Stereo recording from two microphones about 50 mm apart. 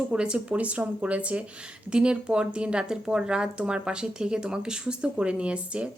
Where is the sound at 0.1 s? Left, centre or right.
Centre.